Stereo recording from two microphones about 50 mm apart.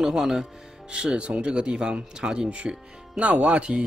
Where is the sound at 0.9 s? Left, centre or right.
Centre.